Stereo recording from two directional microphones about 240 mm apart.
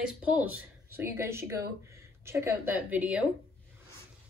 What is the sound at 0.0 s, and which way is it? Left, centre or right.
Speech, centre.